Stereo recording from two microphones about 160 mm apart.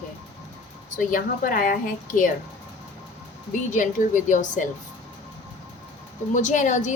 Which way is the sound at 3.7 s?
55° left (ahead or behind).